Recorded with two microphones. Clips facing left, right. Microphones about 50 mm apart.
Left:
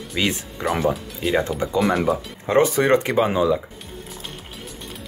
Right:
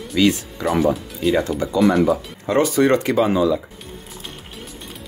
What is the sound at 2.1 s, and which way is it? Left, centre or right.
Speech, left.